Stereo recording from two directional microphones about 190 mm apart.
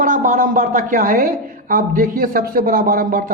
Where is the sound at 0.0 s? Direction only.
45° right (ahead or behind).